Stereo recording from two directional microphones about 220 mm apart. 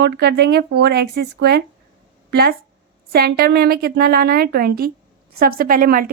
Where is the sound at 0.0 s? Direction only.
50° right (ahead or behind).